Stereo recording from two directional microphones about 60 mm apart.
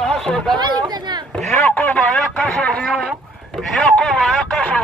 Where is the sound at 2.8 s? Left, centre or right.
Centre.